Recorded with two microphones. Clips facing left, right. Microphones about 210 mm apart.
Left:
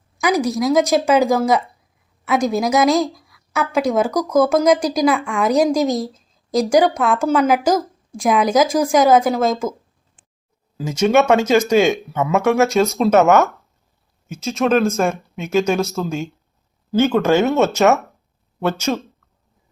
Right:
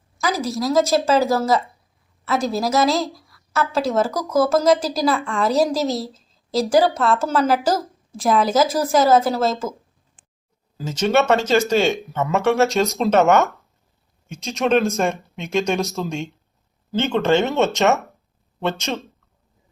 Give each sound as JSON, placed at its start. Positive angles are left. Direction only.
{"t": 0.2, "sound": "a woman's voice", "side_deg": 15}
{"t": 10.8, "sound": "a woman's voice", "side_deg": 10}
{"t": 11.3, "sound": "speech", "side_deg": 0}
{"t": 11.6, "sound": "a woman's voice", "side_deg": 15}
{"t": 12.2, "sound": "speech", "side_deg": 0}